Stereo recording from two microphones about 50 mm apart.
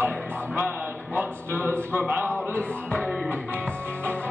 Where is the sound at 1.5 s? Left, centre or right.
Left.